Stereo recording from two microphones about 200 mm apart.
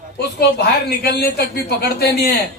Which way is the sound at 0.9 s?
50° left (ahead or behind).